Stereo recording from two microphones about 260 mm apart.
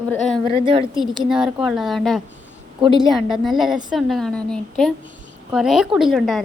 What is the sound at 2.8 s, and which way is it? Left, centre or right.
Speech, centre.